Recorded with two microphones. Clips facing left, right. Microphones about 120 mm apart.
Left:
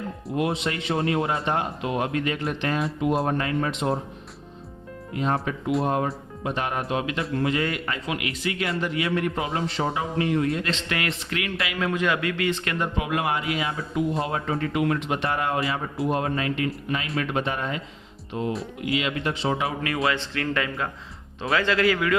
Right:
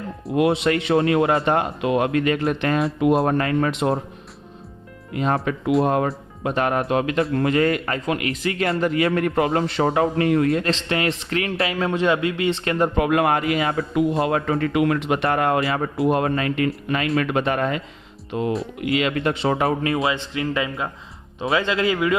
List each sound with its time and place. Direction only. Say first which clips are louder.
0.3 s a man's voice: right 7 dB; 75° right (ahead or behind)
3.0 s a man's voice: right 6 dB; 70° right (ahead or behind)
5.1 s a man's voice: right 4 dB; 70° right (ahead or behind)
6.4 s a man's voice: right 6 dB; 55° right (ahead or behind)
10.8 s speech: right 6 dB; 30° right (ahead or behind)
13.0 s a man's voice: right 7 dB; 55° right (ahead or behind)
18.3 s speech: right 4 dB; 75° right (ahead or behind)
18.8 s a man's voice: right 5 dB; 60° right (ahead or behind)
19.6 s speech: right 4 dB; 30° right (ahead or behind)